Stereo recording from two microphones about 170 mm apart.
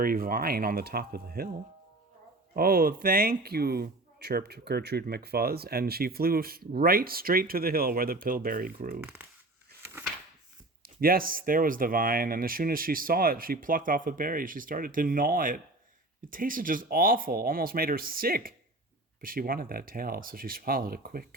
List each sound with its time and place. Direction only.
0.0 s speech: 60° right (ahead or behind)
2.6 s speech: 60° right (ahead or behind)
9.0 s speech: 10° right (ahead or behind)
11.0 s speech: 60° right (ahead or behind)